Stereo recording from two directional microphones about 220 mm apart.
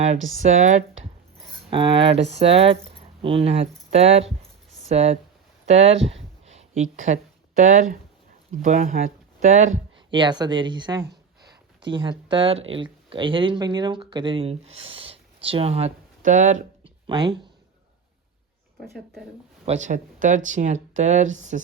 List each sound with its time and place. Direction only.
0.4 s speech: 35° right (ahead or behind)
1.7 s speech: 20° right (ahead or behind)
6.4 s a sound: 30° right (ahead or behind)
6.9 s speech: 35° right (ahead or behind)
10.1 s speech: 20° right (ahead or behind)
11.0 s a sound: 50° right (ahead or behind)
11.8 s speech: 20° right (ahead or behind)
17.1 s speech: 20° right (ahead or behind)
19.6 s speech: 30° right (ahead or behind)